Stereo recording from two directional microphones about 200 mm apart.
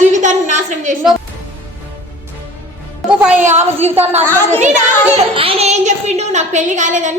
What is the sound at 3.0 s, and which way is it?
Music, 5° right (ahead or behind).